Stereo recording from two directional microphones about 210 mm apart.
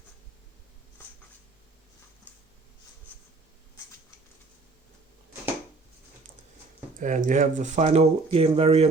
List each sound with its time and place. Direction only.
7.0 s speech: 35° right (ahead or behind)